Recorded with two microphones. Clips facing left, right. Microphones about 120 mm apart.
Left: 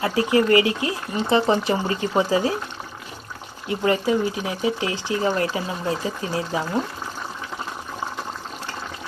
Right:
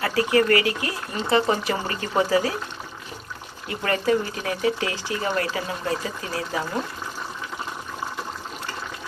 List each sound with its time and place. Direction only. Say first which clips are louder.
0.0 s speech: left 1 dB; 20° left (ahead or behind)
3.7 s speech: left 2 dB; 20° left (ahead or behind)